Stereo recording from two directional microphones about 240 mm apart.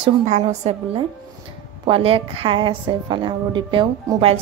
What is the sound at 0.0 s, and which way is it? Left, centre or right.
A woman's voice, right.